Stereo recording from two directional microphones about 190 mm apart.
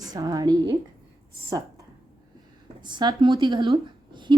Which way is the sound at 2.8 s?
25° right (ahead or behind).